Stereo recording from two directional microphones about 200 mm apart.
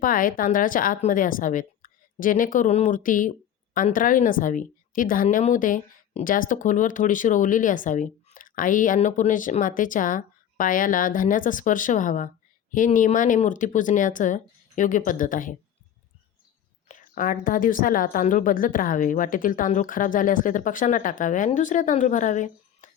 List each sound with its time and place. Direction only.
0.0 s a woman's voice: 45° left (ahead or behind)
16.9 s a woman's voice: 40° left (ahead or behind)